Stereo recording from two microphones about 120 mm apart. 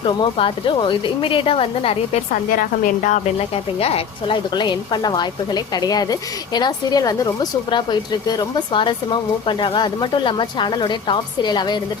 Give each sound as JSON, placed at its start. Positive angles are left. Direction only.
{"t": 0.2, "sound": "a woman's voice", "side_deg": 45}
{"t": 2.8, "sound": "speech", "side_deg": 90}
{"t": 4.5, "sound": "a woman's voice", "side_deg": 40}